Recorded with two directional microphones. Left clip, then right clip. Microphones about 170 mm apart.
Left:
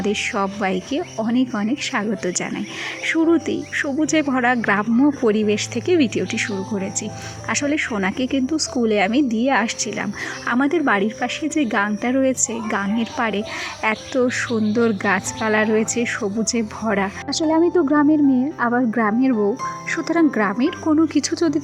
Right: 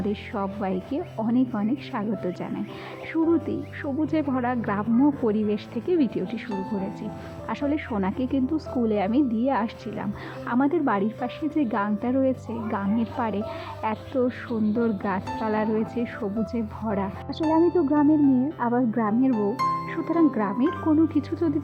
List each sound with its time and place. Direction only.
0.0 s a woman's voice: 20° left (ahead or behind)
7.5 s a woman's voice: 15° left (ahead or behind)
16.8 s a woman's voice: 30° left (ahead or behind)
17.3 s a woman's voice: 20° left (ahead or behind)